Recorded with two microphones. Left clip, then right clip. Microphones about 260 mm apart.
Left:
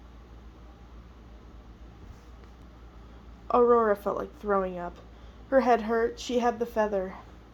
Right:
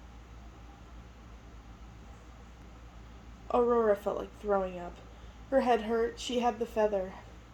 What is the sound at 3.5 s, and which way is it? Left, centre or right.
A woman's voice, left.